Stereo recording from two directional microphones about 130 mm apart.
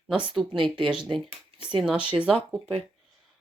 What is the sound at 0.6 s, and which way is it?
Speech, 40° right (ahead or behind).